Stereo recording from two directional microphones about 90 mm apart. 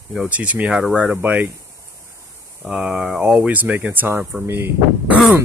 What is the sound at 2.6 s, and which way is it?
Speech, 10° right (ahead or behind).